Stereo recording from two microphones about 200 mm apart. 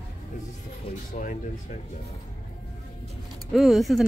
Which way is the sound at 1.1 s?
40° left (ahead or behind).